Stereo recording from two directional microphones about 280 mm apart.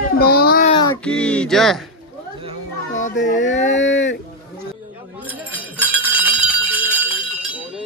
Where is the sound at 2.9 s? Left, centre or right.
Left.